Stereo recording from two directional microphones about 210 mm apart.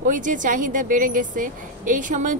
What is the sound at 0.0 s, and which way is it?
A woman's voice, 40° right (ahead or behind).